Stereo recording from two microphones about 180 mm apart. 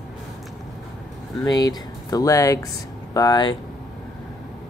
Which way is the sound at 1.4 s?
20° left (ahead or behind).